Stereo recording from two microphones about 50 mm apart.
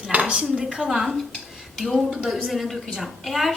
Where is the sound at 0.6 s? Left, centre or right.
Centre.